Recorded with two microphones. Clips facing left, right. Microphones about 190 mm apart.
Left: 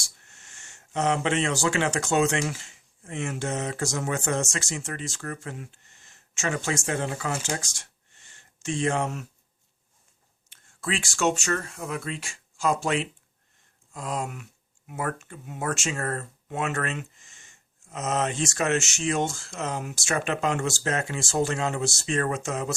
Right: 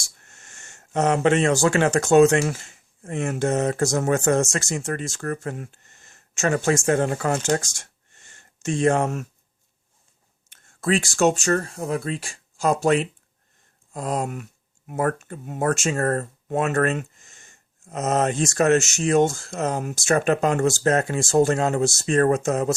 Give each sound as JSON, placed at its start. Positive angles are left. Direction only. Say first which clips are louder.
{"t": 0.2, "sound": "speech", "louder": "right 4 dB", "side_deg": -45}
{"t": 10.5, "sound": "speech", "louder": "right 9 dB", "side_deg": -45}
{"t": 13.9, "sound": "a sound", "louder": "right 5 dB", "side_deg": -40}
{"t": 14.8, "sound": "speech", "louder": "right 7 dB", "side_deg": -45}